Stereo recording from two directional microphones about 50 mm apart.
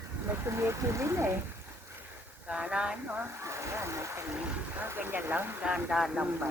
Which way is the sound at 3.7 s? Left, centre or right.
Right.